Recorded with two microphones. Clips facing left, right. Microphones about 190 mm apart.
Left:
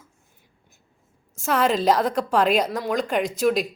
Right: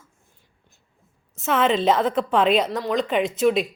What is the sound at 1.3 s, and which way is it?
A woman's voice, centre (ahead or behind).